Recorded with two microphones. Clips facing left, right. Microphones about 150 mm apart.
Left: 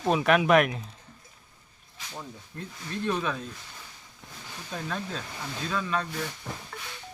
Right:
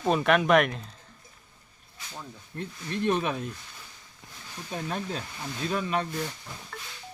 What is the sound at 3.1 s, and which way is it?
Speech, 25° right (ahead or behind).